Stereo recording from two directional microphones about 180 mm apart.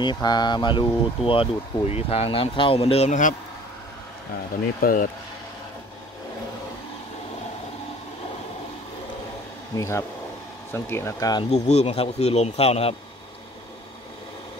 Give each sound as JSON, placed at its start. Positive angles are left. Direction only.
{"t": 0.0, "sound": "speech", "side_deg": 25}
{"t": 4.8, "sound": "speech", "side_deg": 50}
{"t": 9.8, "sound": "speech", "side_deg": 15}
{"t": 11.5, "sound": "speech", "side_deg": 40}